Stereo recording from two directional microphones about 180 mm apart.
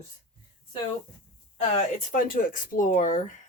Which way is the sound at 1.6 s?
35° left (ahead or behind).